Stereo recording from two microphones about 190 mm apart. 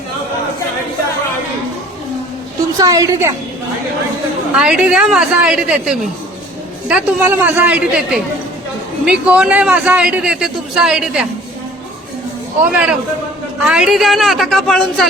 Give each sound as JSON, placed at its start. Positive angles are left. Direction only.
{"t": 2.7, "sound": "a man's voice", "side_deg": -20}
{"t": 4.5, "sound": "a woman's voice", "side_deg": -5}
{"t": 12.7, "sound": "a woman's voice", "side_deg": -5}